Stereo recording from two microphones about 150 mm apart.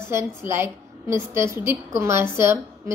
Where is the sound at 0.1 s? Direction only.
15° right (ahead or behind).